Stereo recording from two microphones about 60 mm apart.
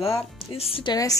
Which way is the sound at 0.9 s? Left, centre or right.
Left.